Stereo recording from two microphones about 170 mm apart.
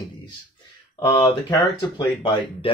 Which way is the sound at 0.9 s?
20° left (ahead or behind).